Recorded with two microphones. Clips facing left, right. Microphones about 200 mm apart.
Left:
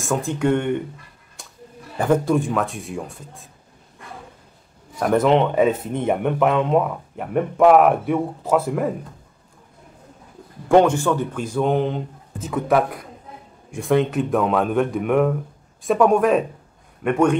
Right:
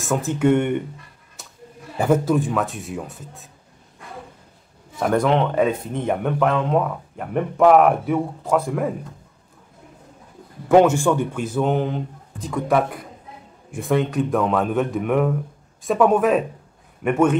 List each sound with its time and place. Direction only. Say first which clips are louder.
0.0 s speech: right 2 dB; 5° right (ahead or behind)
2.0 s speech: even; 5° right (ahead or behind)
4.9 s speech: left 2 dB; centre (ahead or behind)
10.7 s speech: right 1 dB; 5° right (ahead or behind)